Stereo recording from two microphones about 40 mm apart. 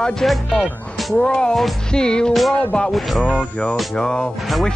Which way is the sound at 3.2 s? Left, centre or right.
Left.